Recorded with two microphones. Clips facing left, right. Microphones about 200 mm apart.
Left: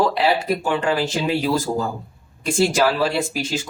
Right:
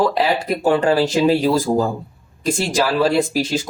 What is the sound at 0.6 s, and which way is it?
Speech, 40° right (ahead or behind).